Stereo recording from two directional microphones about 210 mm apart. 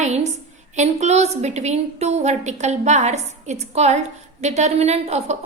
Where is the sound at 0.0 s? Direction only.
30° right (ahead or behind).